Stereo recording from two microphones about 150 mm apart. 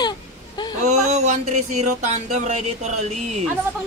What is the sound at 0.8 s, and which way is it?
Music, 50° right (ahead or behind).